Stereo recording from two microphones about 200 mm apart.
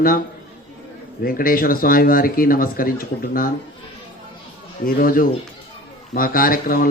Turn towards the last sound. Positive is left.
turn(degrees=45)  # may be behind; listen again after turning